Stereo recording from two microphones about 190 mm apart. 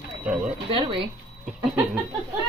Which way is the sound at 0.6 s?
30° right (ahead or behind).